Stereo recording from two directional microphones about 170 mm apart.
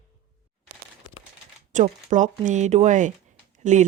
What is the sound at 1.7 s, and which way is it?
Speech, 45° right (ahead or behind).